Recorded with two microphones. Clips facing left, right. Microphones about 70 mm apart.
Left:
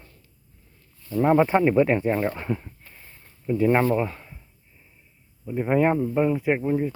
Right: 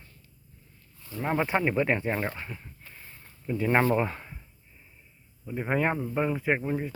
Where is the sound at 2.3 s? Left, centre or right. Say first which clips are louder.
Left 11 dB; left.